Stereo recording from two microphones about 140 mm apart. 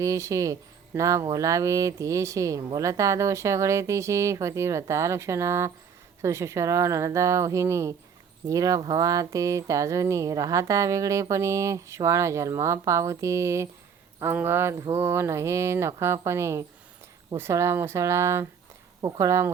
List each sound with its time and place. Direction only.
0.0 s speech: 20° right (ahead or behind)